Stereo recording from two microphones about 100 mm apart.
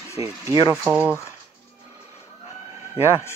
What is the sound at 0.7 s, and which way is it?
Speech, 10° right (ahead or behind).